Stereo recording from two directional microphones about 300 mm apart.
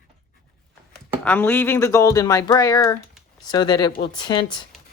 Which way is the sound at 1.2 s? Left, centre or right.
Centre.